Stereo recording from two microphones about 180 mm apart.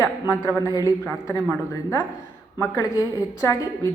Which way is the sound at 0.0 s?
20° left (ahead or behind).